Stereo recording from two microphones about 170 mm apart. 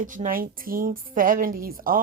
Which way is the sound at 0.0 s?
50° right (ahead or behind).